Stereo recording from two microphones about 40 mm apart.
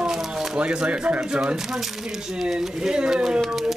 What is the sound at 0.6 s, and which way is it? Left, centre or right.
Speech, right.